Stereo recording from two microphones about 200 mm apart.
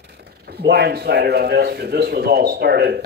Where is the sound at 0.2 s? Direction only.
50° right (ahead or behind).